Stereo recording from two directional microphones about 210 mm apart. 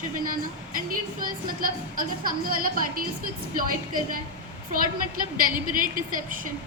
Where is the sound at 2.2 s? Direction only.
45° right (ahead or behind).